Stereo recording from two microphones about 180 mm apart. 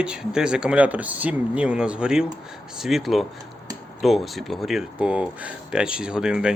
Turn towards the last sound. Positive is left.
turn(degrees=-5)  # may be behind; listen again after turning